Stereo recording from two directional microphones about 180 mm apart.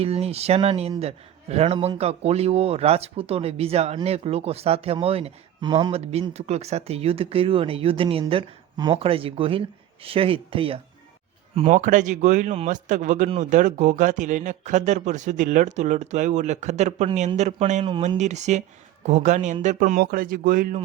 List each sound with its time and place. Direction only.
0.0 s a man's voice: 35° right (ahead or behind)